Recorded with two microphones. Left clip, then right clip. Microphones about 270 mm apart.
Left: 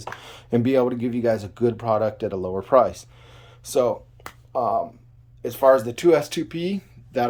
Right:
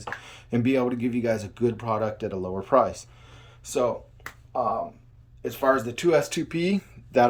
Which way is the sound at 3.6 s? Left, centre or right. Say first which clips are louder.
Left 4 dB; centre.